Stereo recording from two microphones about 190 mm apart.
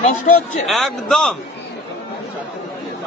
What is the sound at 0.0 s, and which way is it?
Speech, 40° left (ahead or behind).